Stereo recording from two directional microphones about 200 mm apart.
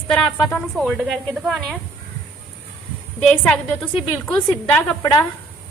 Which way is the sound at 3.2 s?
5° left (ahead or behind).